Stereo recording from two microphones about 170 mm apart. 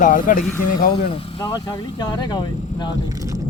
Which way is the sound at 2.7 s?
45° left (ahead or behind).